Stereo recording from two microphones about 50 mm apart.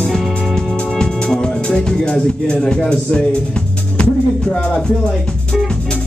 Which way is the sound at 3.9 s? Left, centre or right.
Centre.